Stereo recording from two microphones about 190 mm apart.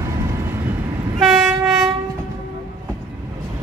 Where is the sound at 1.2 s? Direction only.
Centre (ahead or behind).